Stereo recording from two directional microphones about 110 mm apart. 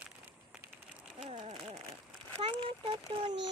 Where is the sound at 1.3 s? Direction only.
70° right (ahead or behind).